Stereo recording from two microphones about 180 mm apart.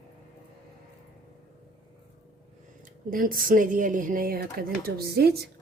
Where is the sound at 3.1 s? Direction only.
50° right (ahead or behind).